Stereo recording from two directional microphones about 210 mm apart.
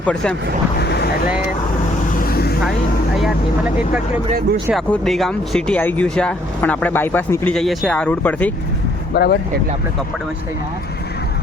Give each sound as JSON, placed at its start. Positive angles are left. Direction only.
{"t": 0.0, "sound": "speech", "side_deg": 5}
{"t": 0.8, "sound": "vehicle", "side_deg": 50}
{"t": 2.2, "sound": "vehicle", "side_deg": 45}
{"t": 4.7, "sound": "speech", "side_deg": 0}
{"t": 9.1, "sound": "speech", "side_deg": 50}